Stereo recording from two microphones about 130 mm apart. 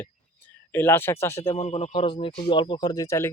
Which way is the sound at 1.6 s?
55° left (ahead or behind).